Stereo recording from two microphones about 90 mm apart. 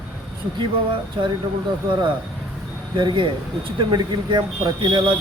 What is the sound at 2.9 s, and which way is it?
Speech, 55° right (ahead or behind).